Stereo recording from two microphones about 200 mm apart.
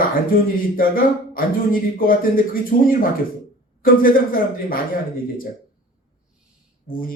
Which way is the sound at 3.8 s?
45° left (ahead or behind).